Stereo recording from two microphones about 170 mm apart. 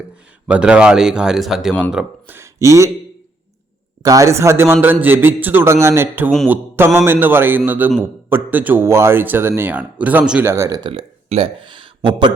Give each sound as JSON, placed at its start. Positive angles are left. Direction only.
{"t": 0.4, "sound": "speech", "side_deg": -5}
{"t": 4.0, "sound": "speech", "side_deg": -20}